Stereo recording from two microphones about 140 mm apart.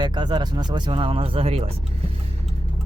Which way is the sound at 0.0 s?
30° right (ahead or behind).